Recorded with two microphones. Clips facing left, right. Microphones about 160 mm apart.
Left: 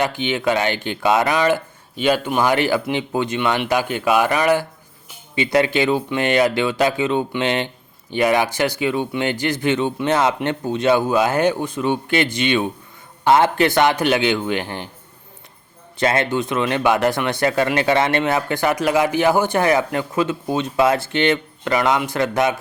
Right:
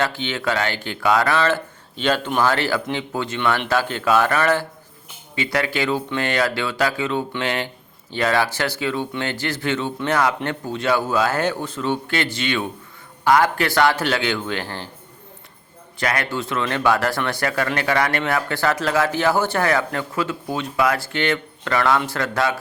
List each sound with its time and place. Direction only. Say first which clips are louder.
0.0 s speech: left 3 dB; 15° left (ahead or behind)
16.0 s speech: left 5 dB; 25° left (ahead or behind)